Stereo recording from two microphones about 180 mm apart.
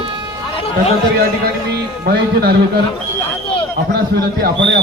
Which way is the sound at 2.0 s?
60° right (ahead or behind).